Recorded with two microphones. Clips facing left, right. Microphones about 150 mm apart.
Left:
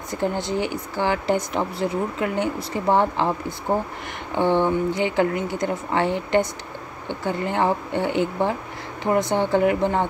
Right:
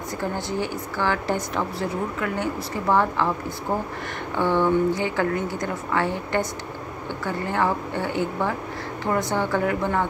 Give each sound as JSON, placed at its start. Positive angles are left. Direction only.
{"t": 0.1, "sound": "speech", "side_deg": 20}